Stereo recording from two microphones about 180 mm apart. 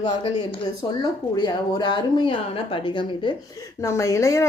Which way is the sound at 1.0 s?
25° left (ahead or behind).